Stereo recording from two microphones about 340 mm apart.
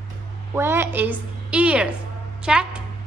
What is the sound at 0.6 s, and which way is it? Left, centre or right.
A woman's voice, centre.